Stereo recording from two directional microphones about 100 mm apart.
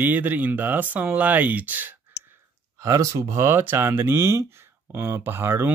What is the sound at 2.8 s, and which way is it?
Speech, 30° right (ahead or behind).